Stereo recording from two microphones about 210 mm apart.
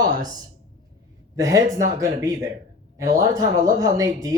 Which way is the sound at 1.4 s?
15° right (ahead or behind).